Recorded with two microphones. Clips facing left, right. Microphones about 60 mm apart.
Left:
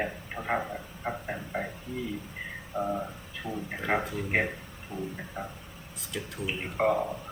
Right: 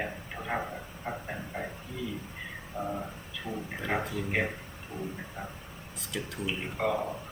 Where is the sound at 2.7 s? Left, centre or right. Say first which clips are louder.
Left 4 dB; left.